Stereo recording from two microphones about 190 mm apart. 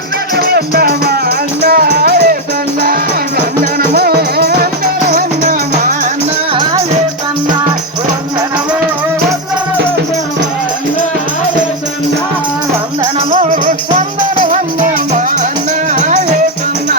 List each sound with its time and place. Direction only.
0.3 s music: 55° right (ahead or behind)
13.3 s music: 40° right (ahead or behind)